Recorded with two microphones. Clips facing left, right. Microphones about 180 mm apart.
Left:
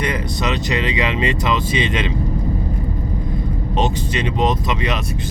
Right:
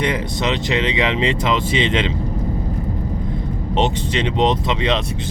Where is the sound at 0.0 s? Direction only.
25° right (ahead or behind).